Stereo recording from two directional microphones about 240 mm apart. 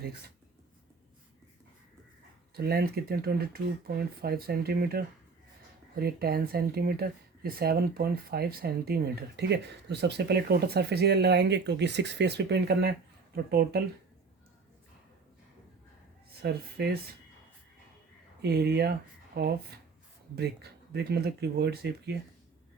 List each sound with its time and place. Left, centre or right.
2.6 s speech: right
16.4 s speech: right
18.4 s speech: right